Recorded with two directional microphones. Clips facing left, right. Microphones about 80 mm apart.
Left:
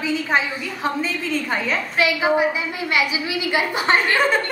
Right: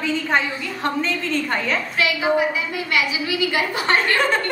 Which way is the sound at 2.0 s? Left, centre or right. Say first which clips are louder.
Left 2 dB; left.